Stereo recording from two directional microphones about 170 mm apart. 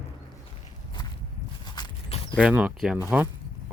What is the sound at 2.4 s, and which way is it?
Speech, 5° right (ahead or behind).